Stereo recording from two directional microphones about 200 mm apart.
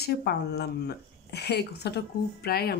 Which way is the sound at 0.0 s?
50° left (ahead or behind).